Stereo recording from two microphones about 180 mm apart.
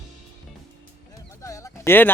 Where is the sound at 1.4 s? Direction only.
15° left (ahead or behind).